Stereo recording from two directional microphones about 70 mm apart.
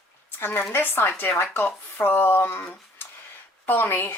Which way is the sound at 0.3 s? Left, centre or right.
Left.